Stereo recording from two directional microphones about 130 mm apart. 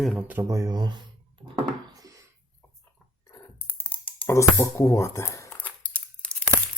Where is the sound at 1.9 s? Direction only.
25° right (ahead or behind).